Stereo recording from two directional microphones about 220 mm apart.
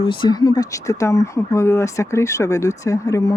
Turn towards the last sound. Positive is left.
turn(degrees=15)  # may be behind; listen again after turning